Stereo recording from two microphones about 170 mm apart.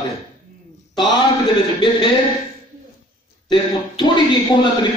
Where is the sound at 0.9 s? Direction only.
25° left (ahead or behind).